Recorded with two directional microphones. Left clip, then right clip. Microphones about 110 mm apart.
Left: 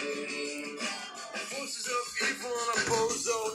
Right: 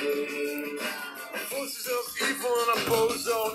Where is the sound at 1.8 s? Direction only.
50° right (ahead or behind).